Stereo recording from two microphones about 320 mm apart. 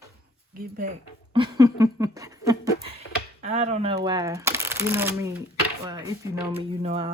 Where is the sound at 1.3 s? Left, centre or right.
Centre.